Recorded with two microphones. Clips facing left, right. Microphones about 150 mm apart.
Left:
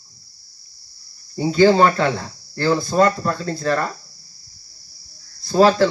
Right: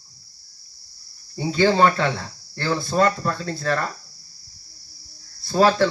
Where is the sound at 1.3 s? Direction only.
5° left (ahead or behind).